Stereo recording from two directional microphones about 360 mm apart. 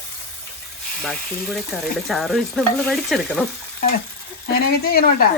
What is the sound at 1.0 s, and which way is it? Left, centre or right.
Speech, centre.